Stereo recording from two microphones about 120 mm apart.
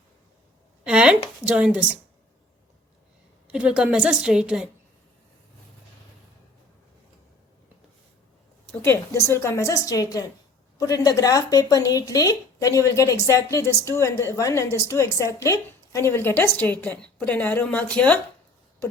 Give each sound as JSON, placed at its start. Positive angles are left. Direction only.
{"t": 0.9, "sound": "a sound", "side_deg": -10}
{"t": 1.5, "sound": "a woman's voice", "side_deg": -10}
{"t": 3.4, "sound": "a woman's voice", "side_deg": -10}
{"t": 8.8, "sound": "a woman's voice", "side_deg": 20}